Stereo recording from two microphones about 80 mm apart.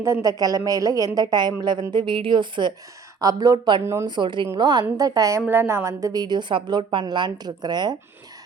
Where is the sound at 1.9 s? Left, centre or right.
Right.